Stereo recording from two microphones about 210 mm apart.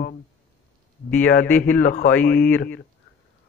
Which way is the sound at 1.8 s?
40° left (ahead or behind).